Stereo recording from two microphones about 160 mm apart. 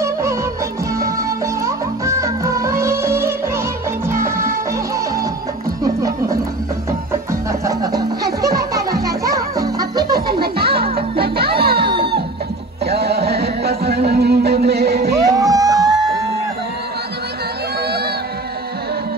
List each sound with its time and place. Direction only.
0.0 s music of bollywood: 15° right (ahead or behind)
0.9 s music: 20° right (ahead or behind)
6.0 s music: 20° right (ahead or behind)
7.6 s music: 20° right (ahead or behind)
10.4 s music: 75° right (ahead or behind)
12.8 s music: 90° right
15.3 s a sound: 25° right (ahead or behind)